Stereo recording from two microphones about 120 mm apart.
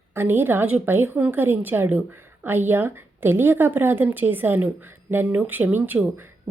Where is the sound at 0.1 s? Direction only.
20° right (ahead or behind).